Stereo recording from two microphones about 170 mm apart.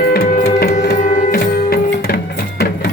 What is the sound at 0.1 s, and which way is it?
Music, 60° left (ahead or behind).